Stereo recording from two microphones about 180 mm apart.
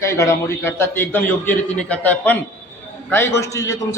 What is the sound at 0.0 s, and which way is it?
A man's voice, 15° left (ahead or behind).